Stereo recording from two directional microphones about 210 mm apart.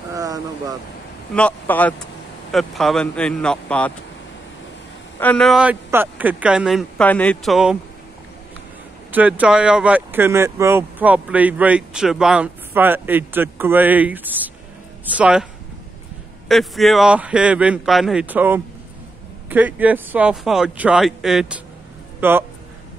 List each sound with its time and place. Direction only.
0.1 s vehicle: 15° right (ahead or behind)
1.3 s a man's voice: 5° left (ahead or behind)
5.2 s speech: 5° left (ahead or behind)
9.1 s speech: 5° right (ahead or behind)
16.4 s speech: centre (ahead or behind)